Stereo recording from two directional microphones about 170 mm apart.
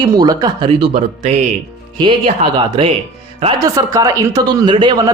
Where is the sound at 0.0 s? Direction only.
20° right (ahead or behind).